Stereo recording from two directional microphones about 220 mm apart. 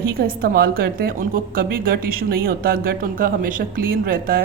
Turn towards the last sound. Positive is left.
turn(degrees=-40)  # may be behind; listen again after turning